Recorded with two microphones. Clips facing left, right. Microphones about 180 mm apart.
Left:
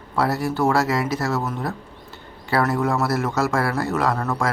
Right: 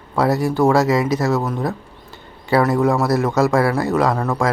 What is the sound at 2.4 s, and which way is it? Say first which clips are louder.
Speech: right 5 dB; 15° right (ahead or behind).